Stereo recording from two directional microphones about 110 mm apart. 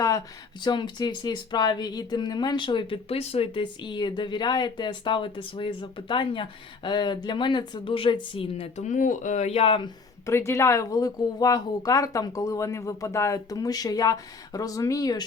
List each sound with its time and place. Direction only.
0.6 s speech: 40° left (ahead or behind)
10.2 s speech: 25° left (ahead or behind)